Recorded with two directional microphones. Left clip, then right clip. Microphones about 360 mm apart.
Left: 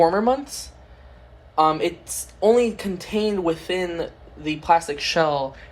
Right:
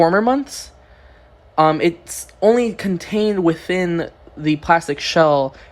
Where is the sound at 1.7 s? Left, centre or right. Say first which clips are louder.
Right 6 dB; right.